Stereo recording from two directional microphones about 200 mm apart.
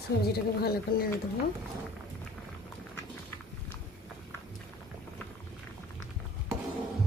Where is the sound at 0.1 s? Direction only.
50° left (ahead or behind).